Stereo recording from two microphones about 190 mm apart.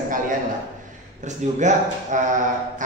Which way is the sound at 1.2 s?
40° right (ahead or behind).